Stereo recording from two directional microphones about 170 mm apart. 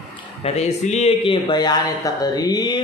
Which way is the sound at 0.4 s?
40° left (ahead or behind).